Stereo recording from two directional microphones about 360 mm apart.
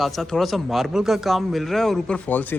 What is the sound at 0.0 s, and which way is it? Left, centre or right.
A man's voice, centre.